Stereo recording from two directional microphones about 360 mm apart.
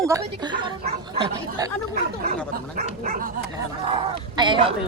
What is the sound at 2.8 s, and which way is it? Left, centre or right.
Dog, right.